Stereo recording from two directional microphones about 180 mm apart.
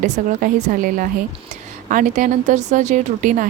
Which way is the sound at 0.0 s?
45° right (ahead or behind).